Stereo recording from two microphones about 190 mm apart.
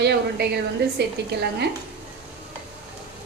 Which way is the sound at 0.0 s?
60° right (ahead or behind).